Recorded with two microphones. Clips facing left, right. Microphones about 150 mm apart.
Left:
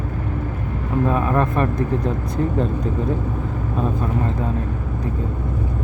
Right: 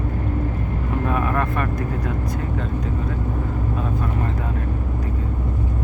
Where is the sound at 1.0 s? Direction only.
25° left (ahead or behind).